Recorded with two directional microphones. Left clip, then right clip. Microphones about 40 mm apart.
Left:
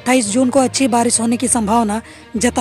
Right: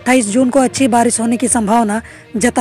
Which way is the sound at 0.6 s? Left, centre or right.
Right.